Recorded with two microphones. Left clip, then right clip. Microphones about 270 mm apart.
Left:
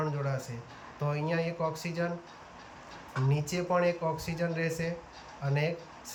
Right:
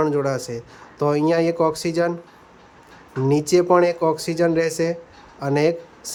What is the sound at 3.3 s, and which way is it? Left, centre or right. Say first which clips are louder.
Speech: right 15 dB; centre.